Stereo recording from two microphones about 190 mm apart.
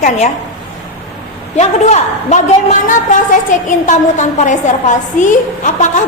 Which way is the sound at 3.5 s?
40° left (ahead or behind).